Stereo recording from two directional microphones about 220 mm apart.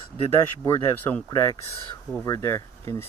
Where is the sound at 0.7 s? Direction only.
10° left (ahead or behind).